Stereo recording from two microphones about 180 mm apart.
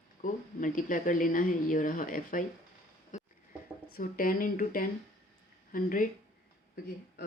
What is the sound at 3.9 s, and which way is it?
Speech, 50° left (ahead or behind).